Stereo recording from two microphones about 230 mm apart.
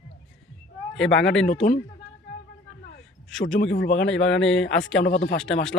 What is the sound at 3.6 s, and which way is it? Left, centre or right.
Speech, left.